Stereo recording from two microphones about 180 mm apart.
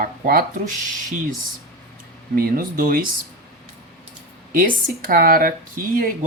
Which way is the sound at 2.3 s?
55° right (ahead or behind).